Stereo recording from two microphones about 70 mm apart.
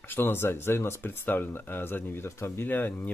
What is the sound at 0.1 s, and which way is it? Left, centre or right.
Speech, left.